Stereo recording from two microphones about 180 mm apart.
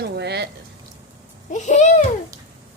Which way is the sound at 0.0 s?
65° right (ahead or behind).